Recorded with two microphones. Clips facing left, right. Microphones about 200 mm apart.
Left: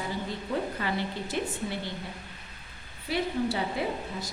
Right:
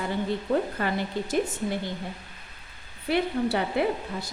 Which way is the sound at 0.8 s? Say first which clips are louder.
Right 3 dB; 45° right (ahead or behind).